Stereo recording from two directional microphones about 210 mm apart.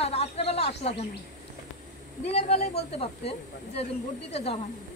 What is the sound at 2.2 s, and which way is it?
Speech, 30° left (ahead or behind).